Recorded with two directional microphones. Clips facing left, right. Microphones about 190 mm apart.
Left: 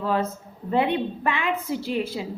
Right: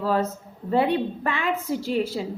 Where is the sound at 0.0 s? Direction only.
40° right (ahead or behind).